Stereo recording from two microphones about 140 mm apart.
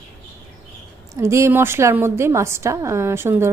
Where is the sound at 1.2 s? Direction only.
20° right (ahead or behind).